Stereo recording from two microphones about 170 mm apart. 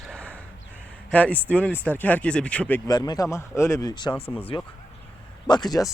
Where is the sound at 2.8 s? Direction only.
25° left (ahead or behind).